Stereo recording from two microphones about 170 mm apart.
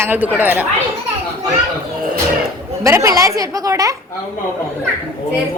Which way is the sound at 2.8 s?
20° right (ahead or behind).